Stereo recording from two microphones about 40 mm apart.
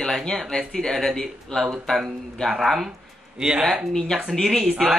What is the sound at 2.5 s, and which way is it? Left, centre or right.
Speech, centre.